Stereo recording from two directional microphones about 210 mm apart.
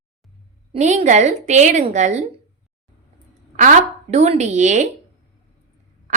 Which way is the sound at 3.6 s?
35° right (ahead or behind).